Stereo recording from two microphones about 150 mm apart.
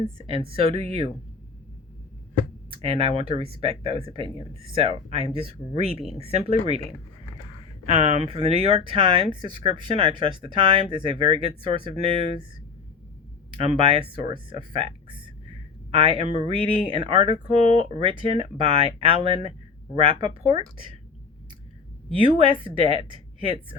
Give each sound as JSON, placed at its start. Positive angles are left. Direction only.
{"t": 0.0, "sound": "speech", "side_deg": -35}
{"t": 2.6, "sound": "speech", "side_deg": -40}
{"t": 8.0, "sound": "speech", "side_deg": -45}
{"t": 13.6, "sound": "speech", "side_deg": -40}
{"t": 22.2, "sound": "speech", "side_deg": -35}